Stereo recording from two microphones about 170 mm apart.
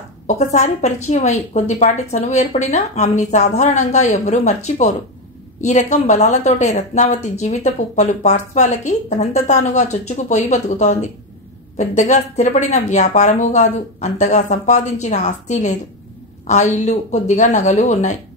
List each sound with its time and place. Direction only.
0.4 s a woman's voice: 40° left (ahead or behind)